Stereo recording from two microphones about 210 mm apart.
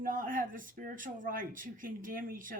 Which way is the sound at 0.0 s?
40° right (ahead or behind).